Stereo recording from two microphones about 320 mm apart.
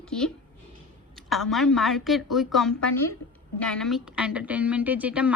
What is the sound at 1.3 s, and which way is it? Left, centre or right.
A woman's voice, centre.